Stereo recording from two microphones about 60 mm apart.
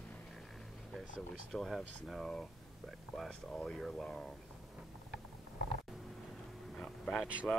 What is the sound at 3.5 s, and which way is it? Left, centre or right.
Speech, centre.